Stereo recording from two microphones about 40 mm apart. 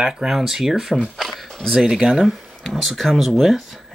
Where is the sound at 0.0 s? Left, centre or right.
Centre.